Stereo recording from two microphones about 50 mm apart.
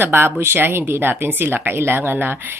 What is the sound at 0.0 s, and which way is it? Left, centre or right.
Speech, right.